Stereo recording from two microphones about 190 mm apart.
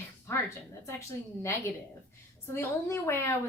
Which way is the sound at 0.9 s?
15° left (ahead or behind).